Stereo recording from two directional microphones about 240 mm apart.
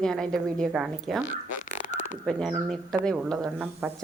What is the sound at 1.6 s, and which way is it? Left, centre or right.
Bird, left.